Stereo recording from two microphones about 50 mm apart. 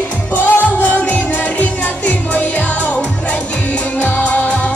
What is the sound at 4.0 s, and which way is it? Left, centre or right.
Music, left.